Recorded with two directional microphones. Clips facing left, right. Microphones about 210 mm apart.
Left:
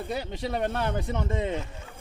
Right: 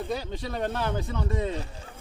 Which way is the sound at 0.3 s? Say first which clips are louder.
Left 2 dB; 20° left (ahead or behind).